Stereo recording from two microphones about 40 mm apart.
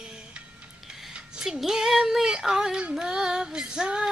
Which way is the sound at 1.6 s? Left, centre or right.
Centre.